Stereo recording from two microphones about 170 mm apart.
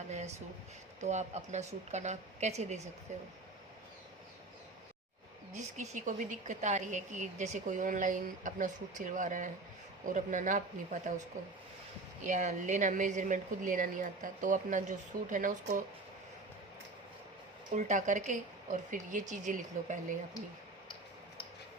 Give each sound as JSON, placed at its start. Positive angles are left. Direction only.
{"t": 1.0, "sound": "a woman's voice", "side_deg": -40}
{"t": 5.7, "sound": "speech", "side_deg": -45}
{"t": 12.2, "sound": "speech", "side_deg": -45}
{"t": 17.7, "sound": "speech", "side_deg": -45}